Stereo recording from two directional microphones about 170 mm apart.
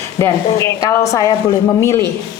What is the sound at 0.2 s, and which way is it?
Speech, 20° left (ahead or behind).